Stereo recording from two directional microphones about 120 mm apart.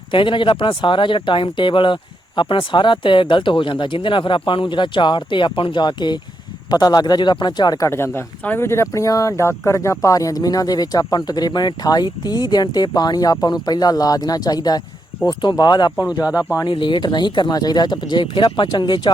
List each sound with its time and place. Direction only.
0.1 s speech: 45° left (ahead or behind)
16.3 s speech: 10° right (ahead or behind)
16.6 s speech: 40° left (ahead or behind)